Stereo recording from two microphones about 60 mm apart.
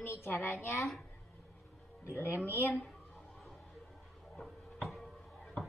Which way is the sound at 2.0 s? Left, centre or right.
Left.